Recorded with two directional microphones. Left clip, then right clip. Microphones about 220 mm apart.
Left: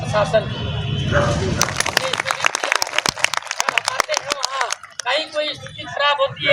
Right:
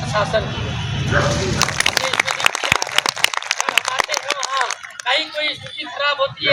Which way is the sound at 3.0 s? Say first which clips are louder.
Right 2 dB; 45° right (ahead or behind).